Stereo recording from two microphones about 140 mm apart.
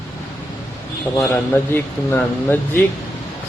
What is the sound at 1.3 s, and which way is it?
Speech, 15° left (ahead or behind).